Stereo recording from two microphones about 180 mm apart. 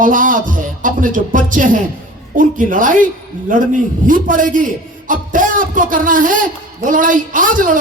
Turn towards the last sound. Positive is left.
turn(degrees=-50)  # may be behind; listen again after turning